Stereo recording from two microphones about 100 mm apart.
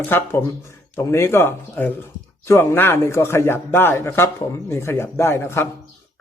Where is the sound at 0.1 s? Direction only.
25° left (ahead or behind).